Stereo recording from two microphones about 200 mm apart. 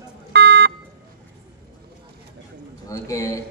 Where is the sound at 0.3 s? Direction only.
60° right (ahead or behind).